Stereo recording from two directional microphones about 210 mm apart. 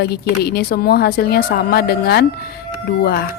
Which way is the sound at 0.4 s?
50° left (ahead or behind).